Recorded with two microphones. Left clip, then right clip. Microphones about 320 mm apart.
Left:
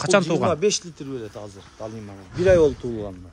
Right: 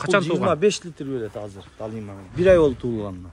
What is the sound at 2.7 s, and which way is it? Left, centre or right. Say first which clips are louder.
Speech: right 2 dB; right.